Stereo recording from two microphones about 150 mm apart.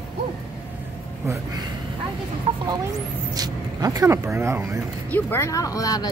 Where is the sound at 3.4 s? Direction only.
25° right (ahead or behind).